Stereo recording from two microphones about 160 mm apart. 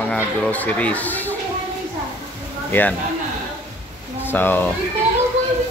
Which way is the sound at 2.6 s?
10° left (ahead or behind).